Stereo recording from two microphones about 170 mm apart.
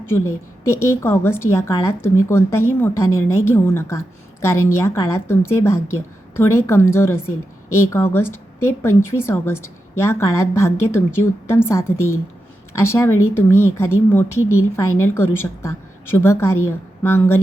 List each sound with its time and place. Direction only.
0.7 s speech: 15° left (ahead or behind)